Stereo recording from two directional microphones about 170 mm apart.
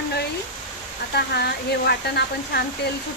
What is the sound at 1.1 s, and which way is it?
Speech, 70° left (ahead or behind).